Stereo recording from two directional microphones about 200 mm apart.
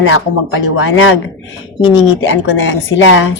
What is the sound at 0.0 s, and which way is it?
A woman's voice, 75° left (ahead or behind).